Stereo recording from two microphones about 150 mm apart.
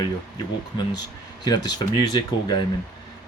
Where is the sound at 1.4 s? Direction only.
25° left (ahead or behind).